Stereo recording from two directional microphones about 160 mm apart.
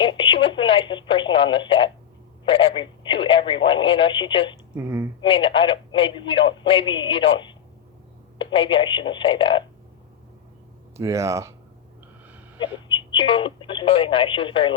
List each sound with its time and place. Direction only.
0.0 s a man's voice: 30° left (ahead or behind)
4.7 s speech: 15° right (ahead or behind)
5.2 s a man's voice: 30° left (ahead or behind)
10.9 s speech: 20° right (ahead or behind)
13.1 s a man's voice: 30° left (ahead or behind)